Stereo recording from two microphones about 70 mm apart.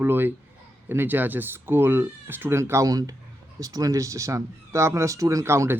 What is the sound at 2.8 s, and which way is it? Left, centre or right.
Speech, right.